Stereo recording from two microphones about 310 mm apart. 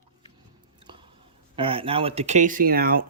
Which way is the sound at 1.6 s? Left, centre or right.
Centre.